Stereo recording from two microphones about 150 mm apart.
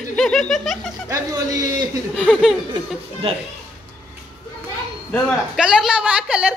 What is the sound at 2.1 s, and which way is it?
Speech, 5° left (ahead or behind).